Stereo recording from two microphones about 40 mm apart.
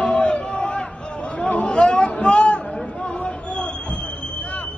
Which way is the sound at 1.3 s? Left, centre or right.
Left.